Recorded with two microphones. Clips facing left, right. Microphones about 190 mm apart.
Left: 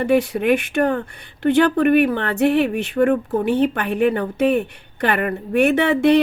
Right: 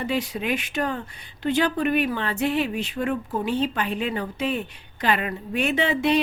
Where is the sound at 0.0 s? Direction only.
60° left (ahead or behind).